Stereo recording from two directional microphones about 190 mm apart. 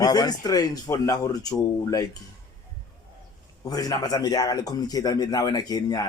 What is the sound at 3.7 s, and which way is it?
A man's voice, 20° left (ahead or behind).